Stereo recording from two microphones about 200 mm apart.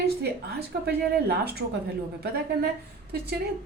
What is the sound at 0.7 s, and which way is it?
A woman's voice, 50° right (ahead or behind).